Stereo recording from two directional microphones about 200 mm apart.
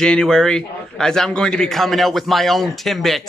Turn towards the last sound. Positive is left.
turn(degrees=0)  # may be behind; listen again after turning